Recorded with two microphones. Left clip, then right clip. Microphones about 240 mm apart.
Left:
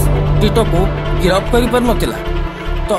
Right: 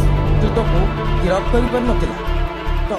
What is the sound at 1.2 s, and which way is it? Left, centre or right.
Speech, left.